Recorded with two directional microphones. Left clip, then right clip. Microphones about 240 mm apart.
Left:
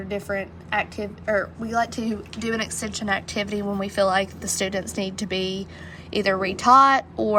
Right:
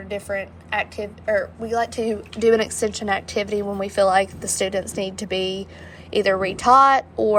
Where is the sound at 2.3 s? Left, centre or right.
Centre; by 7.4 s left.